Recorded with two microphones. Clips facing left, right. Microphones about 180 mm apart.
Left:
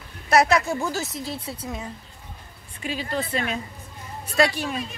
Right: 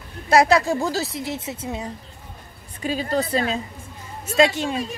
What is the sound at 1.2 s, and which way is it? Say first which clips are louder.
Speech: right 3 dB; 20° right (ahead or behind).